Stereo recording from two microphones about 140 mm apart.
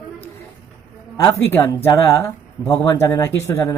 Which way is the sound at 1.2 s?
20° left (ahead or behind).